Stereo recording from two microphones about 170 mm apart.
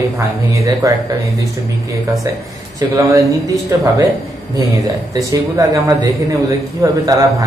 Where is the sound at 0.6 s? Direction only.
20° right (ahead or behind).